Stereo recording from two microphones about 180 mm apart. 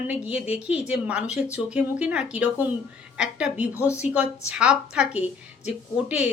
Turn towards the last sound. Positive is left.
turn(degrees=-5)  # may be behind; listen again after turning